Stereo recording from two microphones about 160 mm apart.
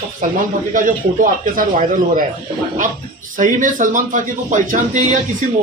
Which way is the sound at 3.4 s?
55° right (ahead or behind).